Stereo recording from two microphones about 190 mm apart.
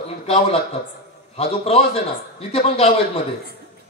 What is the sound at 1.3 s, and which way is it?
Speech, 30° left (ahead or behind).